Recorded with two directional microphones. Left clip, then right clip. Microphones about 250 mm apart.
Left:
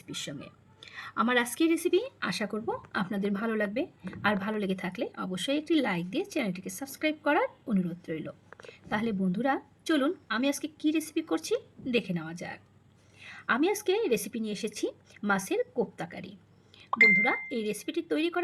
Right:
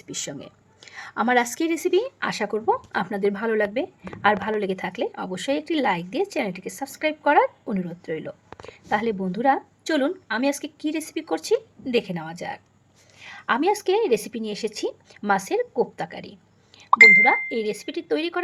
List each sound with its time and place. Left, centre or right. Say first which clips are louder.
0.1 s speech: right 5 dB; centre